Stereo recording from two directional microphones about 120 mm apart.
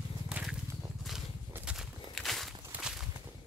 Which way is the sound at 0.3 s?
5° right (ahead or behind).